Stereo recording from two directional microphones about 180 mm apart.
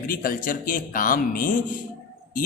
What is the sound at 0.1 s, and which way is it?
Speech, 55° left (ahead or behind).